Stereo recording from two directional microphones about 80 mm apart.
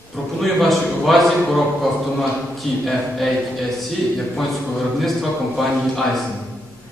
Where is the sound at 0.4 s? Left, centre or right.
Centre.